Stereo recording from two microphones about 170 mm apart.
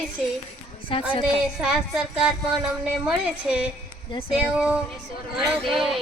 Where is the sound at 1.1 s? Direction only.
30° left (ahead or behind).